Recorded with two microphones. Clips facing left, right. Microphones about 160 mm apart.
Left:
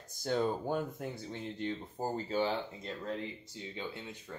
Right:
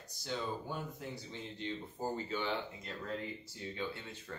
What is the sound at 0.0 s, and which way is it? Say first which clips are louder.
Speech: left 8 dB; 50° left (ahead or behind).